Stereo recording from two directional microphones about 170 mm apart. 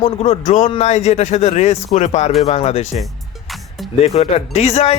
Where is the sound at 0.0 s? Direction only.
40° left (ahead or behind).